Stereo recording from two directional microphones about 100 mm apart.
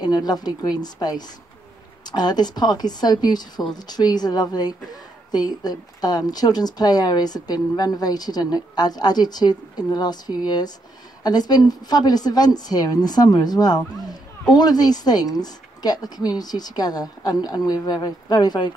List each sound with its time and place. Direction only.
0.0 s a woman's voice: 40° left (ahead or behind)